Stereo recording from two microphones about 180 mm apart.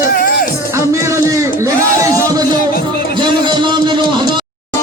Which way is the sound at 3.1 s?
25° right (ahead or behind).